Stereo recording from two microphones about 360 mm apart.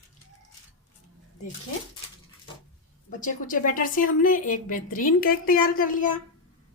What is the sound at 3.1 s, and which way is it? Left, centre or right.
A woman's voice, left.